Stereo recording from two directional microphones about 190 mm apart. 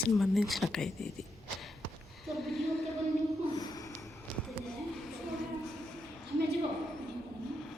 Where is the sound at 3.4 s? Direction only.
20° left (ahead or behind).